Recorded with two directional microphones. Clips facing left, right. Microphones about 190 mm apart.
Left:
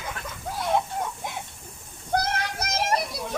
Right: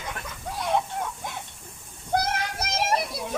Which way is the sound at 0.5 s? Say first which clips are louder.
Left 1 dB; 5° left (ahead or behind).